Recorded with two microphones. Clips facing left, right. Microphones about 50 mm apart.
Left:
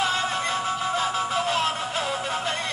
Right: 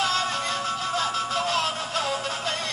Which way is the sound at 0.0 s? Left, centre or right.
Centre.